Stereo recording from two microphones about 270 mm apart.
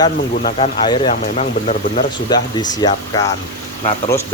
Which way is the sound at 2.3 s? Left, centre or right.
Centre.